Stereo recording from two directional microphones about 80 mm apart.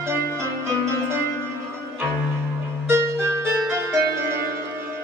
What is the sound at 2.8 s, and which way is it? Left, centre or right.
Music, right.